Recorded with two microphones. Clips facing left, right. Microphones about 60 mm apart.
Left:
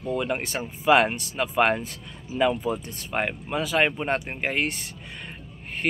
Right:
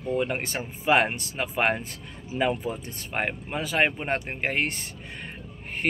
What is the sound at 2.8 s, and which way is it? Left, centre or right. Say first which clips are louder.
Speech: left 2 dB; centre.